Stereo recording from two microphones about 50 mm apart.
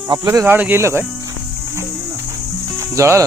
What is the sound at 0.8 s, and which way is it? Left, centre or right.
Speech, right.